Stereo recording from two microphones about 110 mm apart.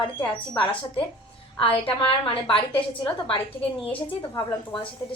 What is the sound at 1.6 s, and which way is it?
A woman's voice, 55° left (ahead or behind).